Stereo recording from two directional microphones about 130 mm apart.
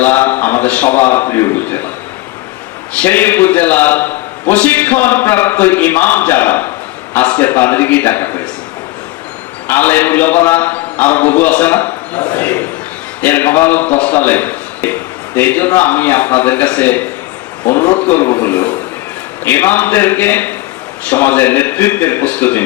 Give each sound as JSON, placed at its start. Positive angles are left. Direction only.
{"t": 0.0, "sound": "a man's voice", "side_deg": 15}
{"t": 3.0, "sound": "a man's voice", "side_deg": 15}
{"t": 9.6, "sound": "a man's voice", "side_deg": 15}